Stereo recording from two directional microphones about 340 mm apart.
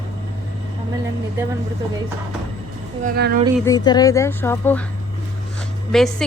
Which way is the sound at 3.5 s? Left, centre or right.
Centre.